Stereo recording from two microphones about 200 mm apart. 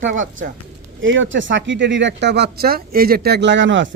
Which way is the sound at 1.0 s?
70° right (ahead or behind).